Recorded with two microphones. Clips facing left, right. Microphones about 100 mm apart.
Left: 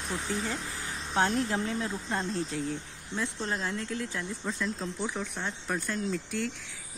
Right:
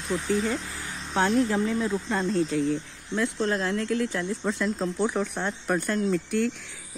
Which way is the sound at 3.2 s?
75° right (ahead or behind).